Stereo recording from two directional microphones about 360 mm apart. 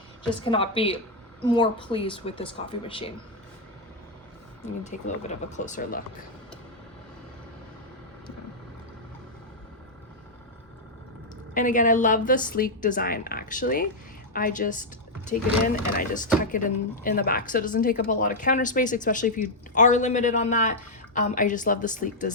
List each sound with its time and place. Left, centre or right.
0.4 s speech: centre
4.6 s speech: centre
11.5 s speech: left